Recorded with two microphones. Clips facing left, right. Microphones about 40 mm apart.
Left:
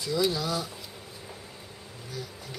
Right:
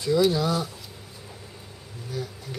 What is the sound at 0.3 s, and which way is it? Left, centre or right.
Speech, centre.